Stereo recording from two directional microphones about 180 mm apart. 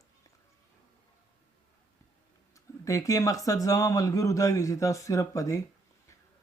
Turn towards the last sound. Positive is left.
turn(degrees=15)  # may be behind; listen again after turning